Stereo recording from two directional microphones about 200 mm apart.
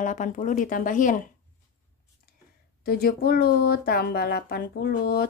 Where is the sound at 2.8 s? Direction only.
50° left (ahead or behind).